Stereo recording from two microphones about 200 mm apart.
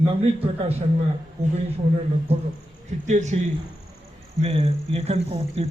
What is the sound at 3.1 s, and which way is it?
Speech, 35° right (ahead or behind).